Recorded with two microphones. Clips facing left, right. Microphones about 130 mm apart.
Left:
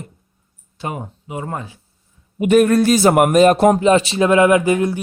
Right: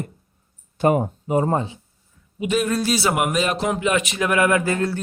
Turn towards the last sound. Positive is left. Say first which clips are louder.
# left 6 dB
turn(degrees=15)  # may be behind; listen again after turning